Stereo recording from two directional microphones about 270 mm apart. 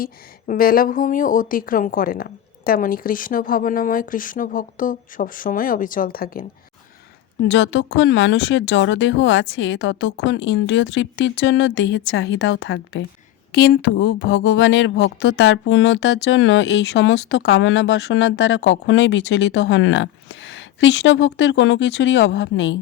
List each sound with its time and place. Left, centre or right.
0.0 s speech: left
7.4 s speech: left